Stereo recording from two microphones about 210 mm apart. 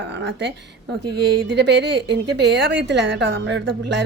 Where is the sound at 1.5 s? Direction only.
55° right (ahead or behind).